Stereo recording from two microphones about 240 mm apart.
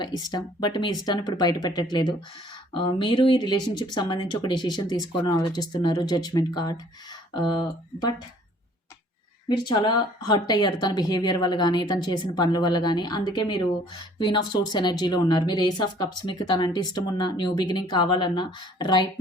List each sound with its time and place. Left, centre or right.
0.2 s speech: centre
9.5 s speech: centre